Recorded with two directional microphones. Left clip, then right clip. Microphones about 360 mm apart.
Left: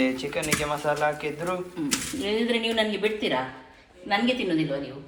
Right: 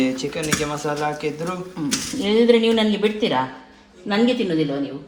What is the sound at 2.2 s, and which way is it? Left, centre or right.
Speech, right.